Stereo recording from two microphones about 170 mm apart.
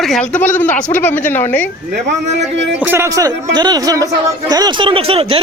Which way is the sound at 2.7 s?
10° right (ahead or behind).